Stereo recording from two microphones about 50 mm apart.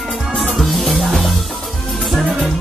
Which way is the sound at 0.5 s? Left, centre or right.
Centre.